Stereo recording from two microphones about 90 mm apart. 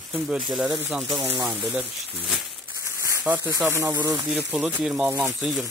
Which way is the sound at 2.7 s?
35° right (ahead or behind).